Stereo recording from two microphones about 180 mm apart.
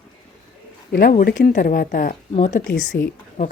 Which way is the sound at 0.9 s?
50° left (ahead or behind).